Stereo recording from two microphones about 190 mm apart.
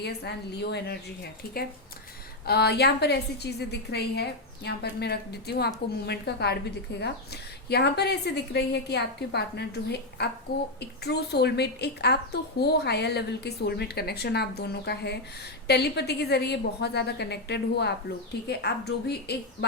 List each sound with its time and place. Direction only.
0.0 s a woman's voice: 60° left (ahead or behind)